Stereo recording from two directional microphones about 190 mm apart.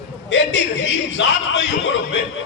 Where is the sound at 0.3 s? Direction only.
70° left (ahead or behind).